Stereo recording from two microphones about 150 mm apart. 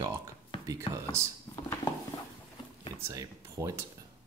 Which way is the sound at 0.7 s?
20° right (ahead or behind).